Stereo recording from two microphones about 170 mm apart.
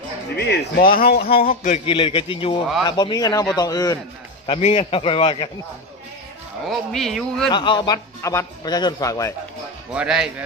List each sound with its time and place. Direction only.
0.4 s a man's voice: 70° left (ahead or behind); by 1.8 s 50° left (ahead or behind)
1.9 s a man's voice: 30° left (ahead or behind)
4.7 s a man's voice: 35° left (ahead or behind)
6.7 s a man's voice: centre (ahead or behind)
7.5 s a man's voice: 25° left (ahead or behind)
9.9 s a man's voice: 5° right (ahead or behind)